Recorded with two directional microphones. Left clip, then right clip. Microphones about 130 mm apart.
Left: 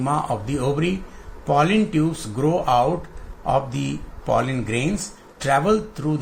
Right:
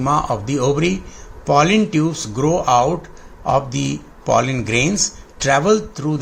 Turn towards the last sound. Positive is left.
turn(degrees=-25)  # may be behind; listen again after turning